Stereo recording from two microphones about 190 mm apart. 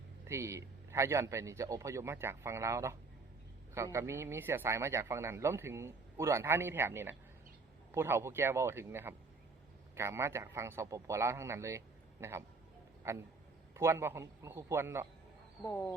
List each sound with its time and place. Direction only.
0.3 s a man's voice: 15° right (ahead or behind)
15.6 s speech: 15° left (ahead or behind)